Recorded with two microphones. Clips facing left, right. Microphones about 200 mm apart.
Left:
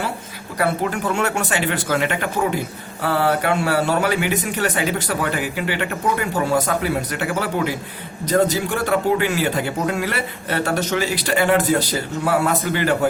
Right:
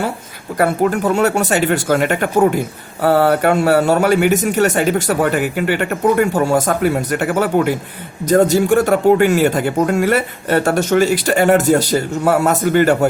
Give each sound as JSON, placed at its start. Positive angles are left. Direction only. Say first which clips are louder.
{"t": 0.6, "sound": "speech", "louder": "right 6 dB", "side_deg": -45}